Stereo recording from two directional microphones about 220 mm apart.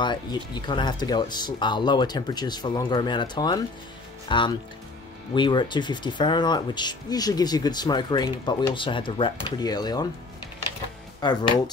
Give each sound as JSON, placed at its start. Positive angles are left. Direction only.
{"t": 0.0, "sound": "speech", "side_deg": 20}
{"t": 11.1, "sound": "speech", "side_deg": 20}